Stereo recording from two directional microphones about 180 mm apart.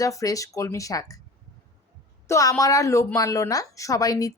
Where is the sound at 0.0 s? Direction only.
20° left (ahead or behind).